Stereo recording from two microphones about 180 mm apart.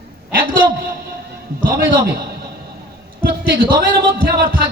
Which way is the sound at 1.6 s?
55° right (ahead or behind).